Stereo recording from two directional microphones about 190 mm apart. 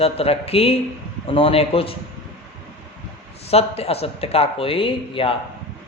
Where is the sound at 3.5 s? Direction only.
30° left (ahead or behind).